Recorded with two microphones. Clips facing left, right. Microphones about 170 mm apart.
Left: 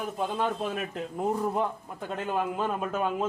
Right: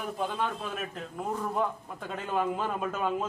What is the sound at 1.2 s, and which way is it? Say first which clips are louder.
Speech: left 3 dB; 20° left (ahead or behind).